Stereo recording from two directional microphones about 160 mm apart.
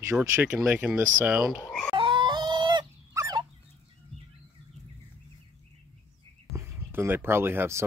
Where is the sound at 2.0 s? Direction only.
30° right (ahead or behind).